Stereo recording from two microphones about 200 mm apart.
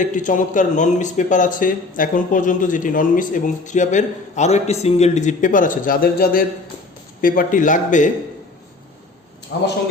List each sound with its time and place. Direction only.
0.0 s a man's voice: 40° left (ahead or behind)
9.5 s a man's voice: 60° left (ahead or behind)